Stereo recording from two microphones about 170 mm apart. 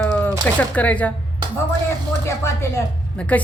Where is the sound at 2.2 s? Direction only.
15° left (ahead or behind).